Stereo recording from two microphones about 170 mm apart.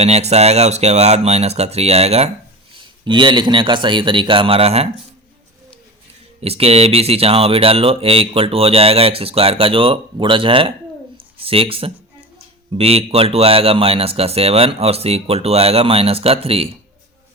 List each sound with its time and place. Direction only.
0.0 s speech: 40° right (ahead or behind)
6.4 s speech: 35° right (ahead or behind)